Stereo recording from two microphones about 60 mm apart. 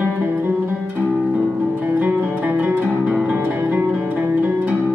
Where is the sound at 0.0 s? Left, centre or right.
Right.